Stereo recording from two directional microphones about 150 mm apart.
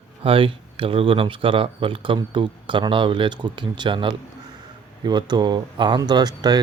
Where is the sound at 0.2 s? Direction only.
35° right (ahead or behind).